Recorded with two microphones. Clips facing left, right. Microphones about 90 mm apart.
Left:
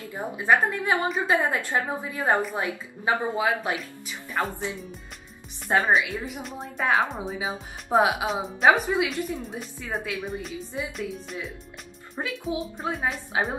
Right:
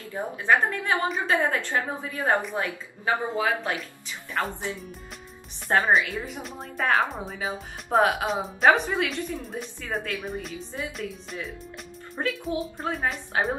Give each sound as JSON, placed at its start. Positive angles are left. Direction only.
{"t": 0.1, "sound": "a woman's voice", "side_deg": 15}
{"t": 5.7, "sound": "speech", "side_deg": 0}